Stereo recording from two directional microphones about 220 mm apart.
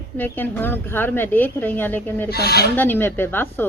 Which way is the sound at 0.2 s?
10° left (ahead or behind).